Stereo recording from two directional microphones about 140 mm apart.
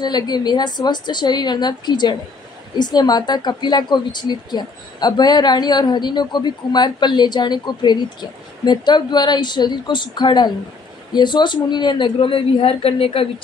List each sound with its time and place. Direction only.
0.0 s speech: 30° left (ahead or behind)